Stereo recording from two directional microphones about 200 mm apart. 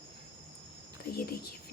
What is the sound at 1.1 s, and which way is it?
Speech, 50° left (ahead or behind).